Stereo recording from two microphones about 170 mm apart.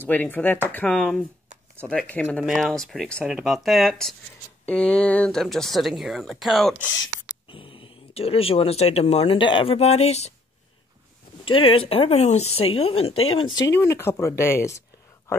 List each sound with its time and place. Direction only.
0.0 s speech: 10° left (ahead or behind)
7.4 s speech: 30° left (ahead or behind)
11.4 s speech: 30° left (ahead or behind)
13.7 s speech: 15° left (ahead or behind)